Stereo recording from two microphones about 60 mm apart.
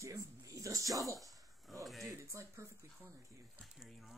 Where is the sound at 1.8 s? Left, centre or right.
Centre.